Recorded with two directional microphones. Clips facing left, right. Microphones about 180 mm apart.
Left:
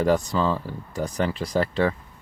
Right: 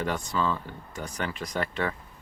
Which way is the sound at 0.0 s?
35° left (ahead or behind).